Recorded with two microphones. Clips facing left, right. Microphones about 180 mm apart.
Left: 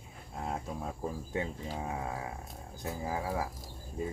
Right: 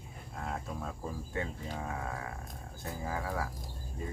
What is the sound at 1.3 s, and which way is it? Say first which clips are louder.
Speech: left 1 dB; 20° left (ahead or behind).